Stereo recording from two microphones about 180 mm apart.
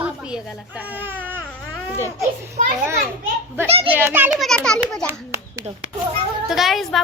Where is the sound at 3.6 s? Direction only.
35° right (ahead or behind).